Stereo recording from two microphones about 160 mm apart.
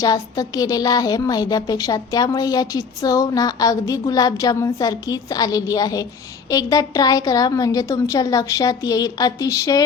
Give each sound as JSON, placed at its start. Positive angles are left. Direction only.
{"t": 0.0, "sound": "a woman's voice", "side_deg": 20}